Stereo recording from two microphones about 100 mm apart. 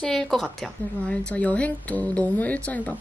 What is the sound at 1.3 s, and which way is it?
Speech, 15° left (ahead or behind).